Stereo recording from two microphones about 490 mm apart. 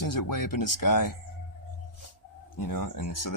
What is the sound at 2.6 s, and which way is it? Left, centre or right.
Speech, left.